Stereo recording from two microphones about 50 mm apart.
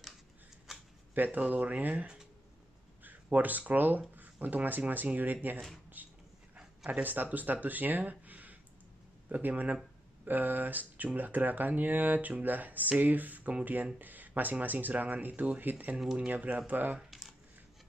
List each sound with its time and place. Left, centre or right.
1.1 s speech: right
6.0 s a sound: right
6.9 s speech: right